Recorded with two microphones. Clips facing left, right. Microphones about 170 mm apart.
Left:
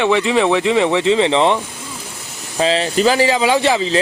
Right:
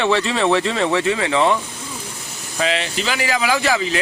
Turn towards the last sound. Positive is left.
turn(degrees=25)  # may be behind; listen again after turning